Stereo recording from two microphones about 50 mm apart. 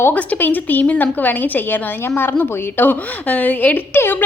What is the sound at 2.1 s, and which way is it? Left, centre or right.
A woman's voice, left.